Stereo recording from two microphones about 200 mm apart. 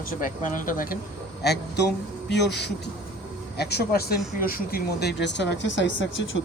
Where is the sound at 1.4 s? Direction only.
55° left (ahead or behind).